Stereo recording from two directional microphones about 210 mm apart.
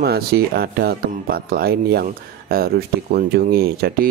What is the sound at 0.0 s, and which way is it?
Speech, 50° right (ahead or behind).